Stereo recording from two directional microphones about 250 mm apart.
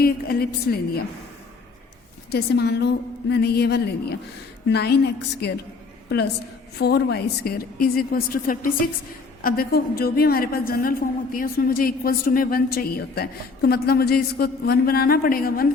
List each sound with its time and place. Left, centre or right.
0.0 s a woman's voice: left
2.3 s a woman's voice: left
6.7 s a woman's voice: left